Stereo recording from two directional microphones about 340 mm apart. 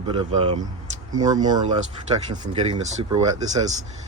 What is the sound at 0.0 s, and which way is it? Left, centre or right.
Speech, centre.